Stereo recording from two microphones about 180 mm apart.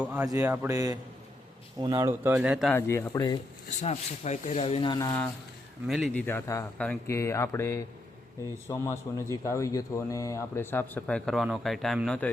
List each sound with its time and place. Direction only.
0.0 s speech: 10° right (ahead or behind)
2.6 s a man's voice: 15° left (ahead or behind)
3.8 s speech: 40° left (ahead or behind)
5.9 s speech: centre (ahead or behind)
6.2 s a man's voice: 15° left (ahead or behind)